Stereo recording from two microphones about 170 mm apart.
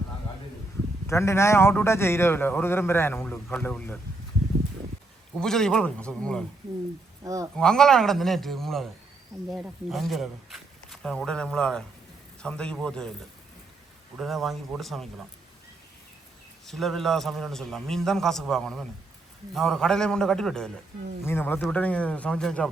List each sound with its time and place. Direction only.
1.0 s a man's voice: 15° left (ahead or behind)
5.4 s speech: 5° left (ahead or behind)
7.3 s speech: 20° right (ahead or behind)
7.5 s speech: 5° left (ahead or behind)
14.2 s speech: centre (ahead or behind)
16.6 s a man's voice: centre (ahead or behind)